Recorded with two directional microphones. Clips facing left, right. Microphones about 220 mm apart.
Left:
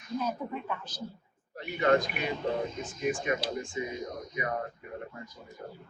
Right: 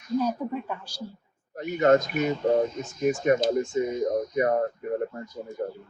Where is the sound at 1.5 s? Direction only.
45° right (ahead or behind).